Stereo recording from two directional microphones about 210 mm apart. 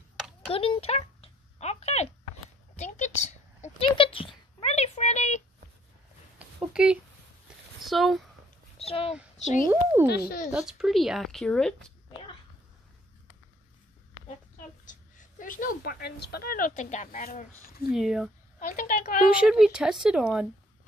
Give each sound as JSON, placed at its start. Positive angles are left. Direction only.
{"t": 0.5, "sound": "a sound", "side_deg": 25}
{"t": 6.3, "sound": "a sound", "side_deg": -5}
{"t": 7.8, "sound": "speech", "side_deg": 0}
{"t": 8.7, "sound": "a sound", "side_deg": 25}
{"t": 9.4, "sound": "speech", "side_deg": 35}
{"t": 10.0, "sound": "speech", "side_deg": 50}
{"t": 10.5, "sound": "speech", "side_deg": 0}
{"t": 14.9, "sound": "speech", "side_deg": 40}
{"t": 17.8, "sound": "speech", "side_deg": 0}
{"t": 18.6, "sound": "a woman's voice", "side_deg": 40}
{"t": 19.4, "sound": "speech", "side_deg": 0}